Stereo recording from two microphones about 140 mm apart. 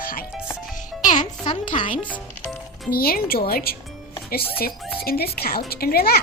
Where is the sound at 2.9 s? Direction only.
90° left.